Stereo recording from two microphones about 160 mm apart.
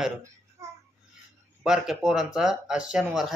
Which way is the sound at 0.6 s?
20° right (ahead or behind).